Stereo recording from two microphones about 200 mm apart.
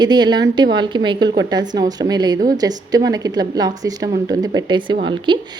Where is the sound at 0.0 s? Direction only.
20° right (ahead or behind).